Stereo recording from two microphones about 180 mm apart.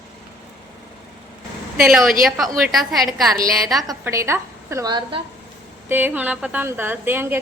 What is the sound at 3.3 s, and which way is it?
A woman's voice, 20° right (ahead or behind).